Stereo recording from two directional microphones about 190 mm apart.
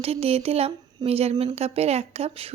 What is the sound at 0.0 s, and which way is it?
A woman's voice, 30° right (ahead or behind).